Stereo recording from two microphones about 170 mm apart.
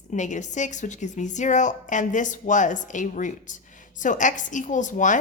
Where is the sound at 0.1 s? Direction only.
45° left (ahead or behind).